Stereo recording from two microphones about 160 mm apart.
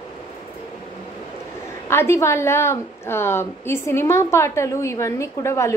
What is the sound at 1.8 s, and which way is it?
A woman's voice, 15° left (ahead or behind).